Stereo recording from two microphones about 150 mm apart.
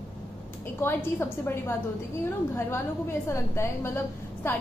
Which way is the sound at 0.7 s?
15° left (ahead or behind).